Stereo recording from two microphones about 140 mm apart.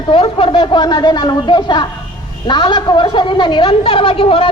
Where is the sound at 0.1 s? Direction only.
40° left (ahead or behind).